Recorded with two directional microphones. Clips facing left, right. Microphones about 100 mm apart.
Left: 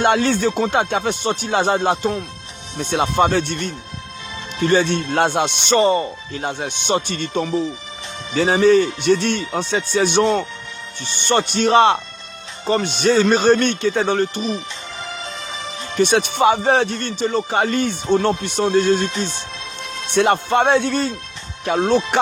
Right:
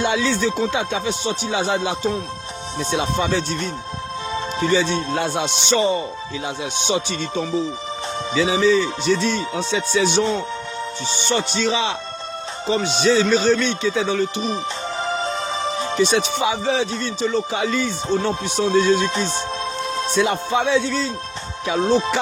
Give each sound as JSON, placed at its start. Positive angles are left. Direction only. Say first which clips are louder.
{"t": 0.0, "sound": "speech", "louder": "left 3 dB", "side_deg": 55}
{"t": 3.2, "sound": "speech", "louder": "left 4 dB", "side_deg": 55}
{"t": 4.7, "sound": "speech", "louder": "left 3 dB", "side_deg": 50}
{"t": 14.4, "sound": "music", "louder": "right 1 dB", "side_deg": -35}
{"t": 16.0, "sound": "speech", "louder": "left 4 dB", "side_deg": 55}
{"t": 18.5, "sound": "speech", "louder": "right 1 dB", "side_deg": 50}
{"t": 19.0, "sound": "speech", "louder": "right 1 dB", "side_deg": -40}
{"t": 20.1, "sound": "speech", "louder": "left 5 dB", "side_deg": 60}